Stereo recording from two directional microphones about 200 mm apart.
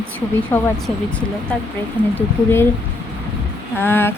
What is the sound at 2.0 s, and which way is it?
Speech, 5° right (ahead or behind).